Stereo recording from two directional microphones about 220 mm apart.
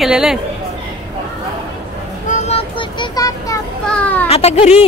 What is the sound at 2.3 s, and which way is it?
Child singing, 25° left (ahead or behind).